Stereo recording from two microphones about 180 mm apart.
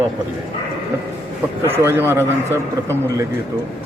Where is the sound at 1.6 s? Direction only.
15° right (ahead or behind).